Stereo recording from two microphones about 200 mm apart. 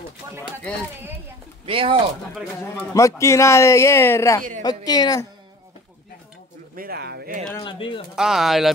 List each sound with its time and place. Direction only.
1.7 s speech: 25° right (ahead or behind)
2.6 s a man's voice: 15° left (ahead or behind)
6.7 s speech: 45° right (ahead or behind)
7.5 s a woman's voice: 25° left (ahead or behind)
8.2 s speech: centre (ahead or behind)